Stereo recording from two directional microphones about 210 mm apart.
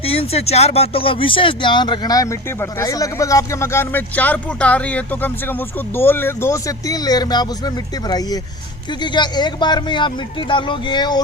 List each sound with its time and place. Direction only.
0.0 s speech: 25° left (ahead or behind)